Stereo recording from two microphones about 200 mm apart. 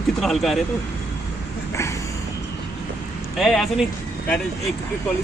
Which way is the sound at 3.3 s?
Centre (ahead or behind).